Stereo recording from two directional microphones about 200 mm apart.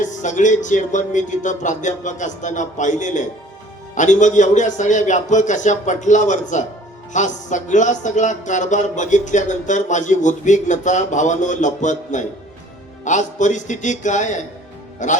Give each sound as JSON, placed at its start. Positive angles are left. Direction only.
{"t": 0.0, "sound": "speech", "side_deg": 40}